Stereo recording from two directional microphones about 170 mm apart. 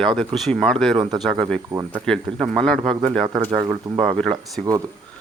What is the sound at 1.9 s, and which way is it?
Speech, 5° left (ahead or behind).